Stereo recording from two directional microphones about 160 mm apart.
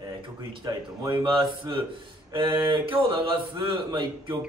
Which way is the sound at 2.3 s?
30° right (ahead or behind).